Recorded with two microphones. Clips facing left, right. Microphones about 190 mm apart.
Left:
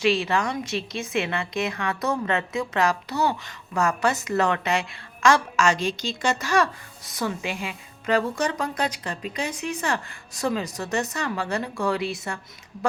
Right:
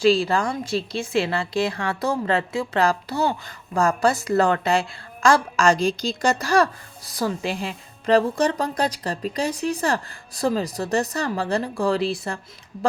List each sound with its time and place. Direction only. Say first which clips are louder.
0.0 s a woman's voice: right 4 dB; 30° right (ahead or behind)